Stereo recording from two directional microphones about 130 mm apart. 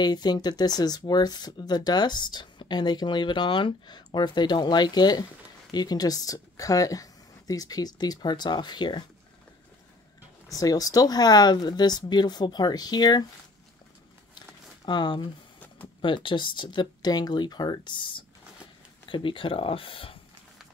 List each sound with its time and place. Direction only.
0.0 s speech: 35° left (ahead or behind)
10.5 s speech: 30° left (ahead or behind)
14.9 s speech: 35° left (ahead or behind)